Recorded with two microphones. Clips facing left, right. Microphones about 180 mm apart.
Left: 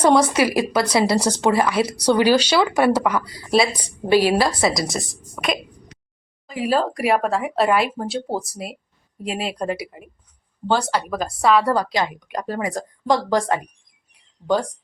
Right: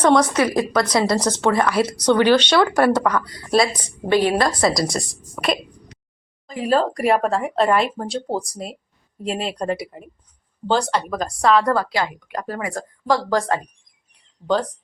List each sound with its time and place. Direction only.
0.0 s speech: 10° left (ahead or behind)
11.1 s speech: 5° left (ahead or behind)
11.7 s speech: 20° left (ahead or behind)